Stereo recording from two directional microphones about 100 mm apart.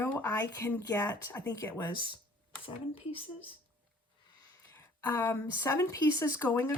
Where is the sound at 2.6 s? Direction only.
65° left (ahead or behind).